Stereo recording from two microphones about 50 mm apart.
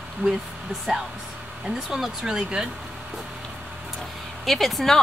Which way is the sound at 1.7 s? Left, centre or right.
Centre.